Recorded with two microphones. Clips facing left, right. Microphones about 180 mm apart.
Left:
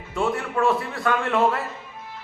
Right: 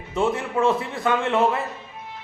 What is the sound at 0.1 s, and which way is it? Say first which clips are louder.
A man's voice: right 2 dB; 20° right (ahead or behind).